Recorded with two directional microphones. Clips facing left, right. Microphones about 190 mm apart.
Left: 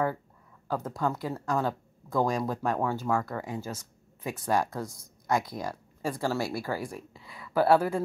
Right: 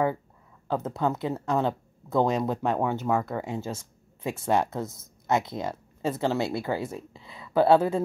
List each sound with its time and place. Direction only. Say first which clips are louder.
0.7 s speech: right 3 dB; 25° right (ahead or behind)